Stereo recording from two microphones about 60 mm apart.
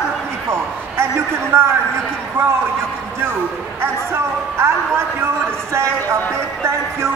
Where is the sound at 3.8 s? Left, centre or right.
Right.